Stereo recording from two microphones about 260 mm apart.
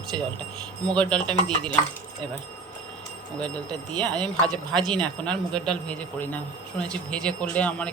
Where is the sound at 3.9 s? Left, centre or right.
Centre.